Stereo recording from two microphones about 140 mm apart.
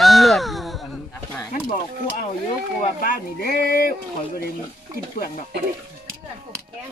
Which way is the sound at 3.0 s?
85° left.